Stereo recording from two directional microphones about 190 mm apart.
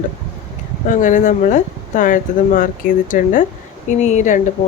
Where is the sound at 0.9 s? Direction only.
40° left (ahead or behind).